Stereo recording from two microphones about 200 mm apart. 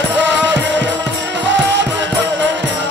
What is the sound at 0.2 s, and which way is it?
Music, 65° right (ahead or behind).